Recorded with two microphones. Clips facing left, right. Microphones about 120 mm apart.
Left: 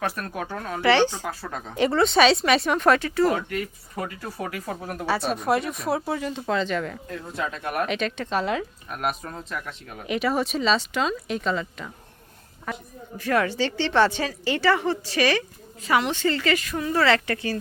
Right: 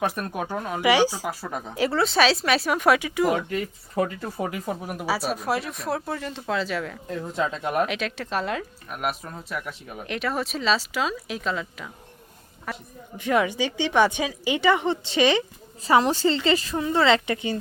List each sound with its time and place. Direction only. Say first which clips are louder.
0.0 s a woman's voice: right 2 dB; 20° right (ahead or behind)
1.7 s speech: left 3 dB; centre (ahead or behind)
7.1 s speech: right 8 dB; 20° right (ahead or behind)
7.9 s a woman's voice: left 2 dB; centre (ahead or behind)
13.1 s a woman's voice: even; 20° right (ahead or behind)
15.8 s a woman's voice: right 3 dB; 35° right (ahead or behind)